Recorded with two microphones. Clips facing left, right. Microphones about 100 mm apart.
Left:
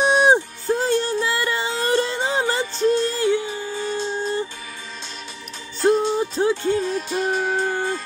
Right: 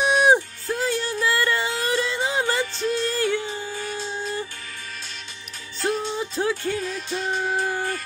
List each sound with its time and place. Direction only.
0.0 s music: 30° left (ahead or behind)
1.2 s music: 20° left (ahead or behind)
2.4 s music: 20° left (ahead or behind)
2.8 s music: 35° left (ahead or behind)
3.2 s a sound: 20° left (ahead or behind)
5.9 s music: 40° left (ahead or behind)
6.4 s music: 25° left (ahead or behind); by 7.3 s 45° left (ahead or behind)
7.5 s music: 25° left (ahead or behind)